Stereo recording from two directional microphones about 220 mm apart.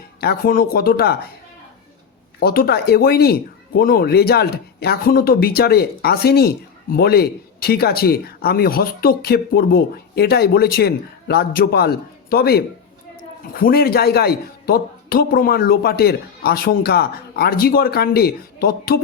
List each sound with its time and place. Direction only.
0.2 s speech: 45° left (ahead or behind)
2.4 s speech: 45° left (ahead or behind)